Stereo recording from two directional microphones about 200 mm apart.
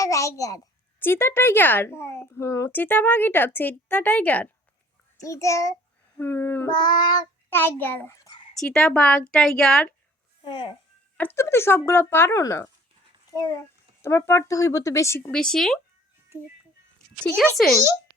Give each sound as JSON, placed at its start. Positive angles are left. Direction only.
{"t": 0.0, "sound": "a child's voice", "side_deg": 15}
{"t": 6.7, "sound": "a child's voice", "side_deg": 20}
{"t": 8.5, "sound": "a woman's voice", "side_deg": 5}
{"t": 10.4, "sound": "speech", "side_deg": 25}
{"t": 11.2, "sound": "a child's voice", "side_deg": 10}
{"t": 15.3, "sound": "a woman's voice", "side_deg": 5}
{"t": 17.6, "sound": "a woman's voice", "side_deg": 0}